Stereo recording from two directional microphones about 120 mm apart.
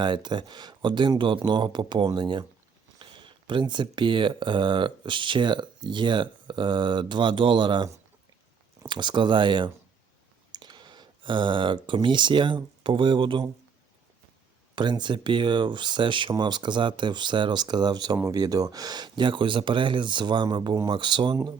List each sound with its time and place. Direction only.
0.0 s speech: 40° right (ahead or behind)
14.8 s speech: 40° right (ahead or behind)